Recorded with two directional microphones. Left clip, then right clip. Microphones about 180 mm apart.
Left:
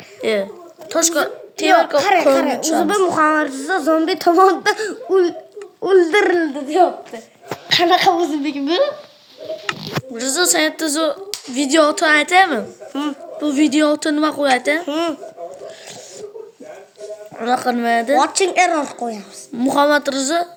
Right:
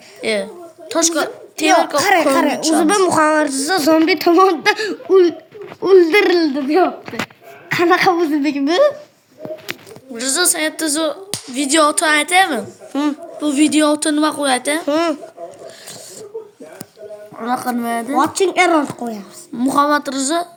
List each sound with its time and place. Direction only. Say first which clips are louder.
0.2 s a child's voice: left 1 dB; 10° left (ahead or behind)
2.0 s a woman's voice: even; 35° right (ahead or behind)
3.1 s a sound: right 2 dB; 40° right (ahead or behind)
3.8 s speech: right 2 dB; 20° right (ahead or behind)
6.4 s a sound: right 1 dB; 45° right (ahead or behind)
7.8 s a woman's voice: right 1 dB; 35° right (ahead or behind)
8.4 s a woman's voice: right 3 dB; 60° right (ahead or behind)
10.2 s a woman's voice: left 1 dB; centre (ahead or behind)
12.9 s speech: right 5 dB; 25° right (ahead or behind)
13.4 s a woman's voice: right 1 dB; 5° left (ahead or behind)
14.8 s a woman's voice: right 4 dB; 30° right (ahead or behind)
17.3 s a woman's voice: left 2 dB; 5° left (ahead or behind)
18.2 s speech: even; 20° right (ahead or behind)
19.5 s a woman's voice: even; centre (ahead or behind)